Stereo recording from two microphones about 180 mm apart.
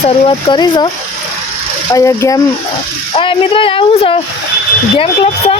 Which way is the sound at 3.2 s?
30° left (ahead or behind).